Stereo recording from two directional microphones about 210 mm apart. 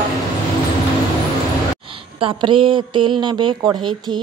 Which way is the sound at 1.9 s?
25° right (ahead or behind).